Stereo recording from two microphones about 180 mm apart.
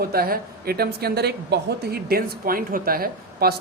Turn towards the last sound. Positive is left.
turn(degrees=-55)  # may be behind; listen again after turning